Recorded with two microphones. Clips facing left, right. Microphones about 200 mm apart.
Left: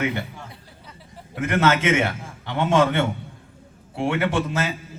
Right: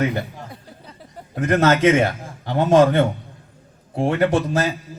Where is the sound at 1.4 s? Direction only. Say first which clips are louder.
Right 4 dB; 40° right (ahead or behind).